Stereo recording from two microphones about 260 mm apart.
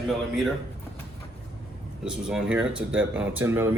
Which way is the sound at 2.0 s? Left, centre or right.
Centre.